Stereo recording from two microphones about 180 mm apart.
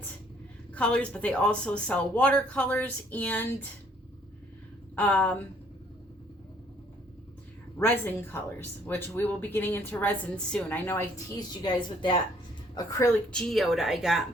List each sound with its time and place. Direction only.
0.7 s speech: 5° left (ahead or behind)
4.9 s speech: 10° left (ahead or behind)
7.8 s speech: 10° left (ahead or behind)
11.3 s a woman's voice: 25° left (ahead or behind)
13.3 s speech: centre (ahead or behind)